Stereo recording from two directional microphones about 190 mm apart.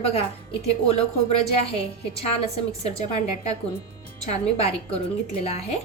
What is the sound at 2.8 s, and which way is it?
A woman's voice, 35° left (ahead or behind).